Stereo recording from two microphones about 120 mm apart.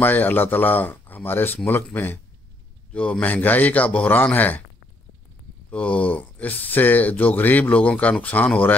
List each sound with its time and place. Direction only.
0.0 s speech: 15° left (ahead or behind)
2.9 s speech: 10° left (ahead or behind)
5.7 s speech: 10° left (ahead or behind)